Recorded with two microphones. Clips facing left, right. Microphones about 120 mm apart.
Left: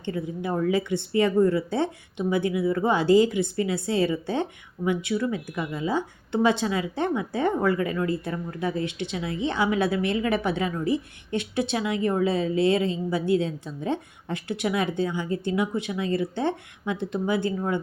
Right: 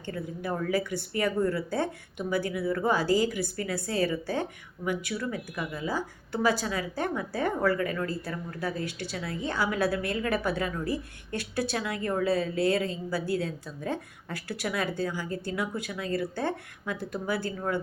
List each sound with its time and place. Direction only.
0.0 s a woman's voice: 20° left (ahead or behind)